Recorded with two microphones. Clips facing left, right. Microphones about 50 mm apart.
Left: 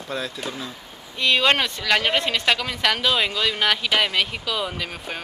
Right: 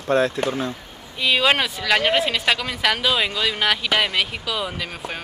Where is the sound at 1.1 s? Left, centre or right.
Centre.